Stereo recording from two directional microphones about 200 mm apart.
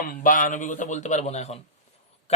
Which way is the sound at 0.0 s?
45° left (ahead or behind).